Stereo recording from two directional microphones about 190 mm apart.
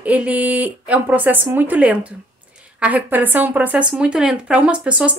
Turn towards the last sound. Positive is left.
turn(degrees=-5)  # may be behind; listen again after turning